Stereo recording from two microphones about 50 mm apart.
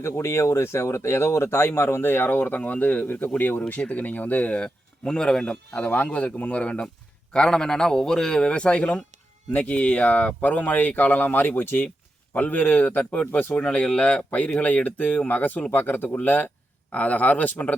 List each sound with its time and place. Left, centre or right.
0.0 s speech: left
3.7 s speech: left
4.6 s a man's voice: centre
5.8 s speech: left
6.1 s speech: left
7.3 s a man's voice: centre; by 17.7 s left